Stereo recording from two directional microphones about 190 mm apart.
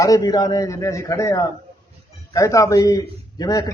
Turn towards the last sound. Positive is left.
turn(degrees=20)  # may be behind; listen again after turning